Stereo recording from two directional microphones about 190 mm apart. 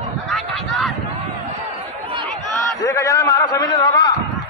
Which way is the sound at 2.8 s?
15° left (ahead or behind).